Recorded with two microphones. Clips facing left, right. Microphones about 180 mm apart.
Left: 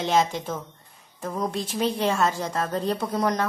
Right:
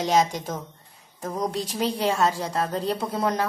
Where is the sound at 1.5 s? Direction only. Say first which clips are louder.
Even; 35° right (ahead or behind).